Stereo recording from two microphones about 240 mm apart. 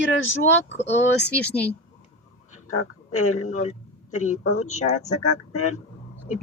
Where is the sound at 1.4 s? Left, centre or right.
Centre.